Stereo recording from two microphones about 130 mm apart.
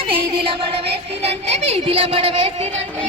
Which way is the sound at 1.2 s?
50° right (ahead or behind).